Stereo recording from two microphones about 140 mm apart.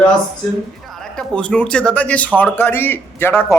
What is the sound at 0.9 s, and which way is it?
A woman's voice, 5° left (ahead or behind).